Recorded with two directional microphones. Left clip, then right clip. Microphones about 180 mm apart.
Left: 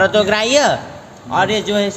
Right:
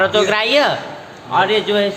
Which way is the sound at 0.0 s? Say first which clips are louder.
Left 1 dB; 40° left (ahead or behind).